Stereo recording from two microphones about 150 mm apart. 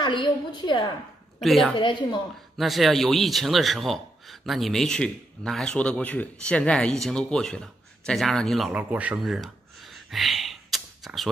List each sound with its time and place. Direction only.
0.0 s a woman's voice: 30° left (ahead or behind)
1.4 s a man's voice: centre (ahead or behind)
1.8 s a woman's voice: 30° left (ahead or behind)
2.5 s a man's voice: centre (ahead or behind)
8.7 s a sound: 10° right (ahead or behind)